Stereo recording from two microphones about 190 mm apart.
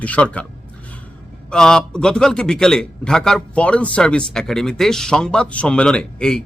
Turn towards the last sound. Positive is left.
turn(degrees=5)  # may be behind; listen again after turning